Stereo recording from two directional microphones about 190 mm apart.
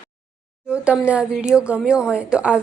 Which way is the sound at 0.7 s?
5° right (ahead or behind).